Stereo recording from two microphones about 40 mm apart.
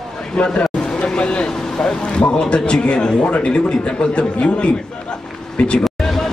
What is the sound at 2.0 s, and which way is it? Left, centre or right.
A man's voice, left.